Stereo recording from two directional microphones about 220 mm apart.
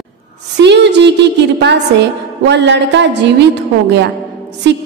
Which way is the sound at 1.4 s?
50° right (ahead or behind).